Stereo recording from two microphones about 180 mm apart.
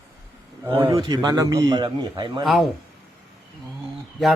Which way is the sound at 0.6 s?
15° right (ahead or behind).